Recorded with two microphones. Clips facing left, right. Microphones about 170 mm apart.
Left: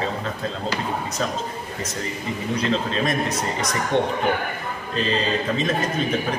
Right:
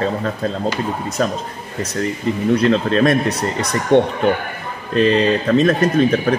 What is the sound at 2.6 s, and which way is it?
Speech, 65° right (ahead or behind).